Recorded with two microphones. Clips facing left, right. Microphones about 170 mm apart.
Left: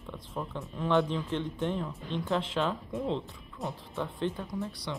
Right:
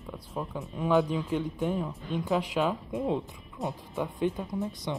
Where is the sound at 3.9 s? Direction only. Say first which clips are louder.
Right 3 dB; 15° right (ahead or behind).